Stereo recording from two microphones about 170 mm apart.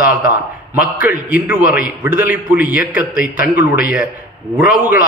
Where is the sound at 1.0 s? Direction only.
10° right (ahead or behind).